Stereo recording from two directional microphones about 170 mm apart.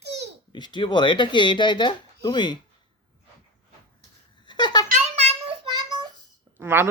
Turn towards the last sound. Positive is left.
turn(degrees=-15)  # may be behind; listen again after turning